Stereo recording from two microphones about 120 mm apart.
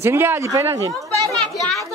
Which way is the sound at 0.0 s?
20° right (ahead or behind).